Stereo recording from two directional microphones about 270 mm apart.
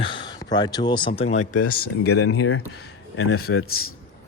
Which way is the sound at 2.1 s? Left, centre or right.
Left.